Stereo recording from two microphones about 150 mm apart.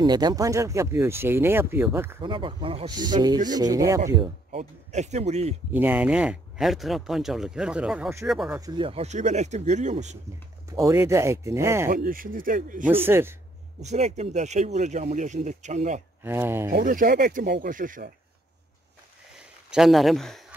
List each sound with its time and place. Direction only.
0.0 s speech: 25° right (ahead or behind)
2.2 s speech: 35° right (ahead or behind)
2.9 s speech: 30° right (ahead or behind)
4.5 s speech: 50° right (ahead or behind)
5.7 s speech: 10° right (ahead or behind)
8.5 s speech: 25° right (ahead or behind)
8.8 s speech: 45° right (ahead or behind)
10.7 s speech: 20° right (ahead or behind)
11.9 s speech: 70° right (ahead or behind)
12.8 s speech: 15° right (ahead or behind)
13.7 s speech: 50° right (ahead or behind)
16.2 s speech: 15° right (ahead or behind)
16.7 s speech: 70° right (ahead or behind)
19.7 s speech: centre (ahead or behind)